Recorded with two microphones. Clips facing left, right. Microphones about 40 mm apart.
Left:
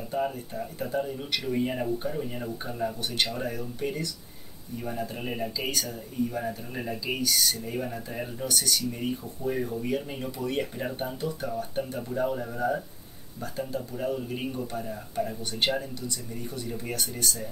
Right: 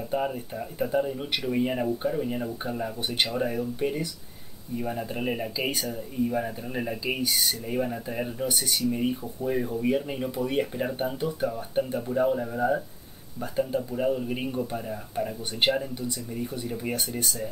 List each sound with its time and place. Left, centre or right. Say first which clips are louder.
0.1 s speech: right 1 dB; centre
8.5 s speech: right 1 dB; centre
9.5 s speech: right 1 dB; centre
9.8 s speech: right 4 dB; centre